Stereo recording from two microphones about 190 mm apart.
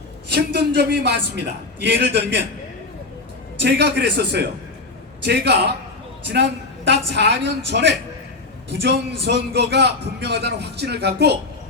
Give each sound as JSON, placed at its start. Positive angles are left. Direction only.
{"t": 0.3, "sound": "a man's voice", "side_deg": -60}
{"t": 3.6, "sound": "a man's voice", "side_deg": -65}